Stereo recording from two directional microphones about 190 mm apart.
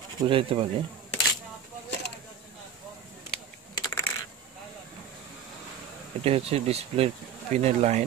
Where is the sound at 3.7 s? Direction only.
20° left (ahead or behind).